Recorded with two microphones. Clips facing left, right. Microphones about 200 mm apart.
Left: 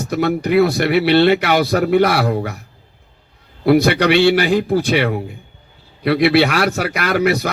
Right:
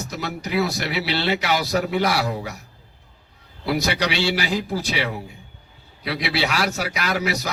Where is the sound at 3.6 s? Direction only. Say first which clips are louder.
Left 10 dB; 60° left (ahead or behind).